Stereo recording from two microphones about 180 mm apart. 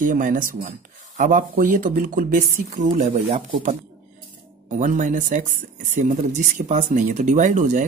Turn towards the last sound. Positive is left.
turn(degrees=-45)  # may be behind; listen again after turning